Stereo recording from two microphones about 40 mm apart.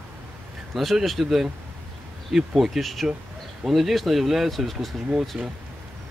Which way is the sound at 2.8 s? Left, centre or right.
Centre.